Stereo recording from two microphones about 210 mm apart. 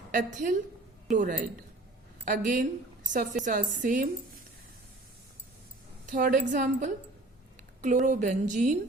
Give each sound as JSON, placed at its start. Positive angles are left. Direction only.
{"t": 0.1, "sound": "a woman's voice", "side_deg": -40}
{"t": 6.1, "sound": "a woman's voice", "side_deg": -40}